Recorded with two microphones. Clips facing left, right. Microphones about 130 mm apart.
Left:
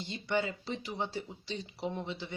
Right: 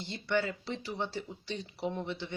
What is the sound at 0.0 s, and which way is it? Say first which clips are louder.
Speech: right 1 dB; 15° left (ahead or behind).